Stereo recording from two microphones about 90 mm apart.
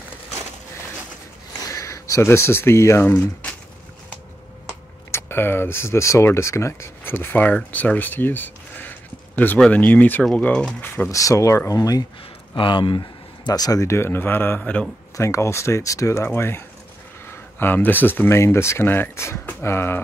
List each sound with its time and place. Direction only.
1.7 s speech: 35° left (ahead or behind)
3.1 s speech: 20° left (ahead or behind)
5.1 s speech: 25° left (ahead or behind)
11.1 s speech: 35° left (ahead or behind)
12.5 s speech: 65° left (ahead or behind); by 14.6 s 25° left (ahead or behind)
14.6 s speech: 10° left (ahead or behind)
15.1 s speech: 35° left (ahead or behind)